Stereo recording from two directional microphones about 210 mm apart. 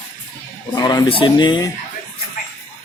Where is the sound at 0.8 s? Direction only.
20° left (ahead or behind).